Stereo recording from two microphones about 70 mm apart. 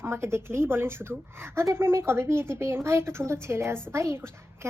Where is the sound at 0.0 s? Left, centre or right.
Right.